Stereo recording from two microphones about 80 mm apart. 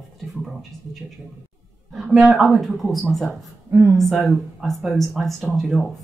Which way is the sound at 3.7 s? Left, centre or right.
Right.